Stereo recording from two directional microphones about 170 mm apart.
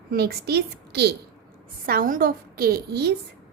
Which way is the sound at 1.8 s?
55° right (ahead or behind).